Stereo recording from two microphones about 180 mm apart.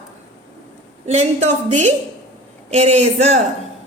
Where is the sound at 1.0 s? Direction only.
40° right (ahead or behind).